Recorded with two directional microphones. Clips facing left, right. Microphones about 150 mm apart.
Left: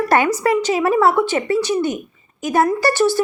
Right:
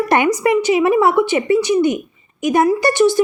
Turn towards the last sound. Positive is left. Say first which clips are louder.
# right 3 dB
turn(degrees=-15)  # may be behind; listen again after turning